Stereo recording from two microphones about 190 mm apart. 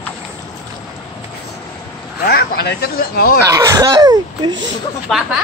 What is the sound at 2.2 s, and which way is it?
Speech, 55° left (ahead or behind).